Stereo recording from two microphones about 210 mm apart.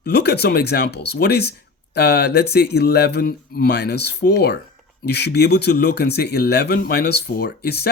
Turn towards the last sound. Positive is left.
turn(degrees=50)  # may be behind; listen again after turning